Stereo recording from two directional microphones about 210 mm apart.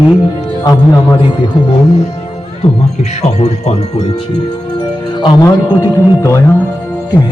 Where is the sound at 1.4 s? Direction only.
20° left (ahead or behind).